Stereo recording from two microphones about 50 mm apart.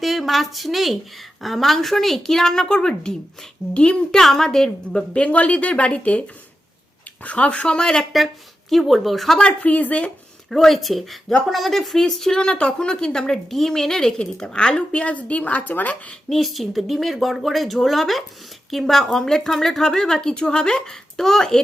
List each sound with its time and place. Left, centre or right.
0.0 s a woman's voice: centre
4.2 s a woman's voice: centre
5.1 s a woman's voice: left
8.7 s speech: centre
9.6 s a woman's voice: left
10.5 s speech: centre
12.4 s a woman's voice: left
16.3 s a woman's voice: centre